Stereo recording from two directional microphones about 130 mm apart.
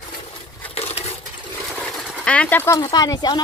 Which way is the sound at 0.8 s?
50° left (ahead or behind).